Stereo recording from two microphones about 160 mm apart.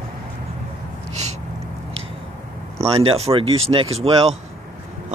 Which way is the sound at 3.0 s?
40° right (ahead or behind).